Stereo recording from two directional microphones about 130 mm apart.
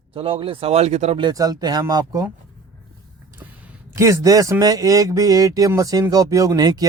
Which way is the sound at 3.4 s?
15° right (ahead or behind).